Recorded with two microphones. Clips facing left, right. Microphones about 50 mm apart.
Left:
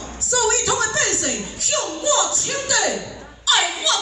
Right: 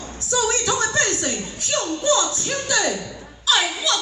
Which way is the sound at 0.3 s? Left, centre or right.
Centre.